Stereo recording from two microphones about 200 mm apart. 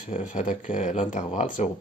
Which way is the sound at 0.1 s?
35° left (ahead or behind).